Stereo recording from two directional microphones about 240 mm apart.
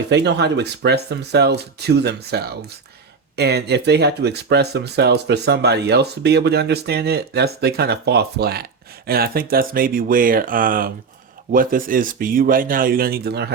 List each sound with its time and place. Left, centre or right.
0.1 s a man's voice: right